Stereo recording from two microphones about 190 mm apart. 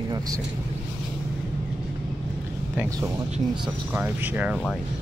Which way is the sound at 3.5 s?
5° right (ahead or behind).